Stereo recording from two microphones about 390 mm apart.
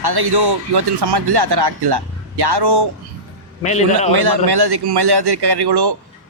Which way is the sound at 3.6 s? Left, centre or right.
Centre.